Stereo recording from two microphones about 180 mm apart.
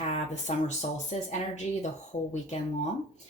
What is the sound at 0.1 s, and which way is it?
Speech, 40° left (ahead or behind).